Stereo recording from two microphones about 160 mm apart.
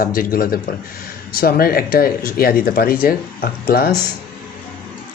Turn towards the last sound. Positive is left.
turn(degrees=70)  # may be behind; listen again after turning